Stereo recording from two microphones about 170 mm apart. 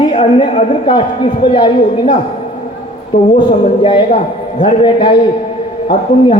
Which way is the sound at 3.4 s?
25° left (ahead or behind).